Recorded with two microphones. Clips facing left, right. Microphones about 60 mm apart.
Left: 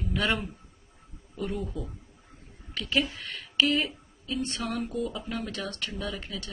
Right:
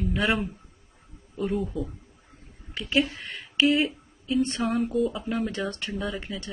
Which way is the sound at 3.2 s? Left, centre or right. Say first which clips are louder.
Right 3 dB; centre.